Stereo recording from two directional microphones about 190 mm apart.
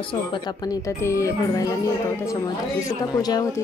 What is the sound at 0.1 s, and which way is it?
Speech, 25° left (ahead or behind).